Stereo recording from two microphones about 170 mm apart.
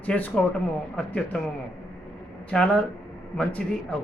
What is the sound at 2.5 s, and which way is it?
A man's voice, 5° left (ahead or behind).